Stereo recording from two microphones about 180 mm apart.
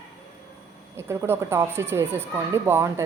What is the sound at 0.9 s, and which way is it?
Speech, 15° right (ahead or behind).